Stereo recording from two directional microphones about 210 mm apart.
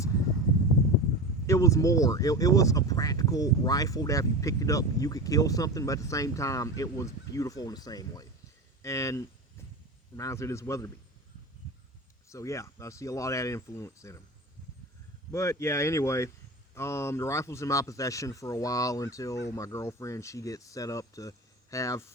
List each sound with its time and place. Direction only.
1.5 s speech: 15° left (ahead or behind)
12.3 s speech: 15° left (ahead or behind)
15.3 s speech: 15° left (ahead or behind)